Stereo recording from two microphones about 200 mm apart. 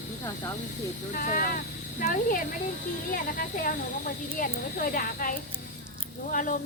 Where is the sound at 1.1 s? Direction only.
45° left (ahead or behind).